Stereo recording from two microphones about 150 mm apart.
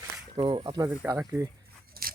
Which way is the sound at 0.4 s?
30° right (ahead or behind).